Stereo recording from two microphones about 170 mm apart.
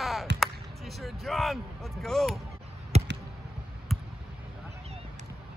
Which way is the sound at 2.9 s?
40° right (ahead or behind).